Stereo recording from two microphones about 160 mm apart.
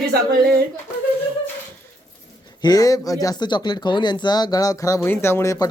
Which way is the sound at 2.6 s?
25° left (ahead or behind).